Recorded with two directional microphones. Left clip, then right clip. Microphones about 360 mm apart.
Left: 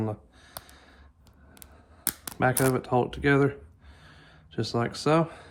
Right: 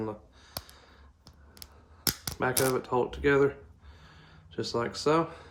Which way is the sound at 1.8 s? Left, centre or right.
Left.